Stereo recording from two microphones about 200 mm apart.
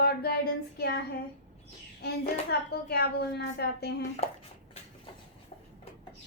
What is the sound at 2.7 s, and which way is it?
Child singing, 50° left (ahead or behind).